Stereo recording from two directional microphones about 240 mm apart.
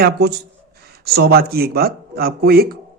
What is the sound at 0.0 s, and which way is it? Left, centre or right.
Speech, right.